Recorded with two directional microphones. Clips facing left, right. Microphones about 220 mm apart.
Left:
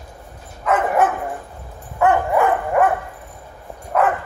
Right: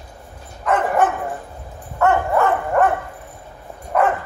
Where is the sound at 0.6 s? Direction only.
5° left (ahead or behind).